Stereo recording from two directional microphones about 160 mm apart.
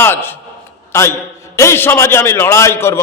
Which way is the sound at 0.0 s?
15° left (ahead or behind).